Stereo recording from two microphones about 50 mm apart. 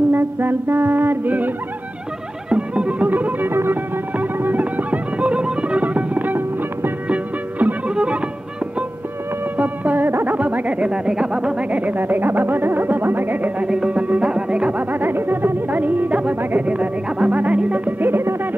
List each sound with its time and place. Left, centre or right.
0.1 s music: right
2.5 s music: right
3.4 s music: right
4.6 s music: right
7.9 s music: right
9.6 s music: right
11.1 s speech: centre
11.8 s speech: right
13.7 s music: right
18.1 s music: right